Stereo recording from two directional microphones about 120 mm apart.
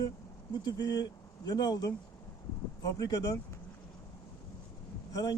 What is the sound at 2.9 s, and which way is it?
Speech, 30° left (ahead or behind).